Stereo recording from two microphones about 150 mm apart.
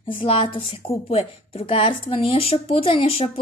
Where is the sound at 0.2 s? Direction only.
35° left (ahead or behind).